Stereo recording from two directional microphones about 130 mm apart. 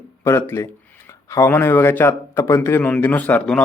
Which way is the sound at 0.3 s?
20° left (ahead or behind).